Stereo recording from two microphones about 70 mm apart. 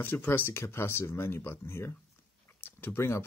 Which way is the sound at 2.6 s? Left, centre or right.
Left.